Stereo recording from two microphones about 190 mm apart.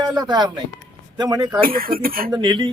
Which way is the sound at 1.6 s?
50° right (ahead or behind).